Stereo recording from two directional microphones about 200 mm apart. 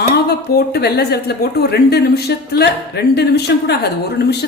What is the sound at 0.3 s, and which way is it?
A woman's voice, 55° left (ahead or behind).